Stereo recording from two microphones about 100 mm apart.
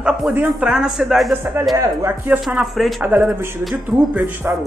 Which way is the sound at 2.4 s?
Centre (ahead or behind).